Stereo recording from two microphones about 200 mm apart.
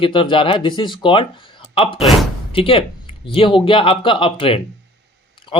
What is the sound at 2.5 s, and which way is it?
Speech, 25° left (ahead or behind).